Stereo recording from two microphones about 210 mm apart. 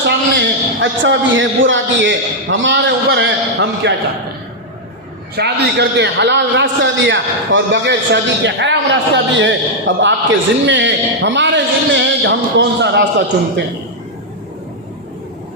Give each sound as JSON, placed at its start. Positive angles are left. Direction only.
{"t": 0.0, "sound": "a man's voice", "side_deg": -60}
{"t": 5.4, "sound": "a man's voice", "side_deg": -55}